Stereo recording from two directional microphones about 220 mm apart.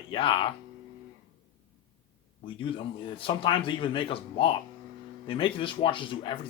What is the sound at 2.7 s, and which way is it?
Speech, 25° left (ahead or behind).